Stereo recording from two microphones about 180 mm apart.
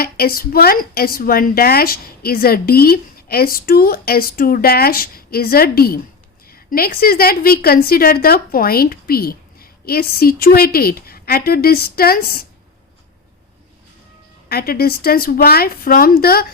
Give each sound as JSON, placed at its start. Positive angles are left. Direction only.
{"t": 0.0, "sound": "a woman's voice", "side_deg": 55}
{"t": 14.5, "sound": "a woman's voice", "side_deg": 60}